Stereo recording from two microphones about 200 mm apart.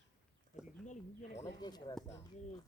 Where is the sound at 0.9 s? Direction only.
35° left (ahead or behind).